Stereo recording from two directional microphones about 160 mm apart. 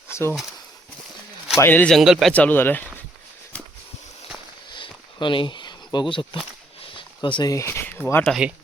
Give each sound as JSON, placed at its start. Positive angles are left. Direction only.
{"t": 0.1, "sound": "a sound", "side_deg": 15}
{"t": 1.5, "sound": "speech", "side_deg": 15}
{"t": 2.0, "sound": "speech", "side_deg": 0}
{"t": 2.3, "sound": "speech", "side_deg": 10}
{"t": 4.7, "sound": "a sound", "side_deg": 30}
{"t": 8.3, "sound": "speech", "side_deg": -5}